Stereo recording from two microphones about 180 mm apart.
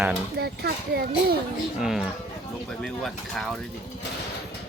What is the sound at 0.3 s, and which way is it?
Speech, 60° right (ahead or behind).